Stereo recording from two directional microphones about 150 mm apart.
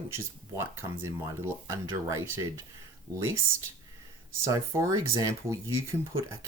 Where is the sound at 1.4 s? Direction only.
20° right (ahead or behind).